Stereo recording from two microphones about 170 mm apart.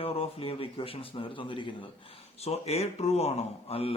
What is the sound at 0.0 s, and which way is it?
Speech, 35° left (ahead or behind).